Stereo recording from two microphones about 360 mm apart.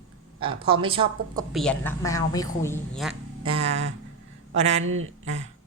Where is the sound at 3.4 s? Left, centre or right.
Centre.